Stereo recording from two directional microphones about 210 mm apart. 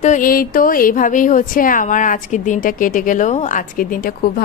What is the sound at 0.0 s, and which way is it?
A woman's voice, 40° left (ahead or behind).